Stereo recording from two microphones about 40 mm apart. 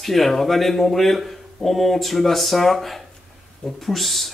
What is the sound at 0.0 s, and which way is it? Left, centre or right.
Speech, centre.